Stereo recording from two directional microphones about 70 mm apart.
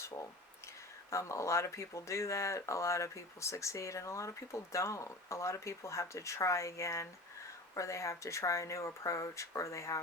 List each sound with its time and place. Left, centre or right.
1.1 s speech: left